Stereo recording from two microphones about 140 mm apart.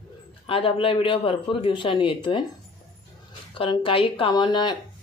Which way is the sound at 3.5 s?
40° left (ahead or behind).